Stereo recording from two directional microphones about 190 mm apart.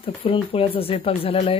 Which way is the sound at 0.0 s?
30° left (ahead or behind).